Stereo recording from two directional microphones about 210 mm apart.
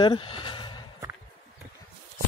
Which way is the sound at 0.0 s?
25° left (ahead or behind).